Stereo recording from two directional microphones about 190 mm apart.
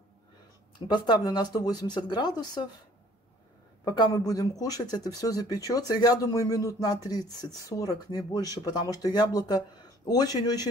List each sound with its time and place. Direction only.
0.7 s speech: 25° left (ahead or behind)
3.8 s speech: 20° left (ahead or behind)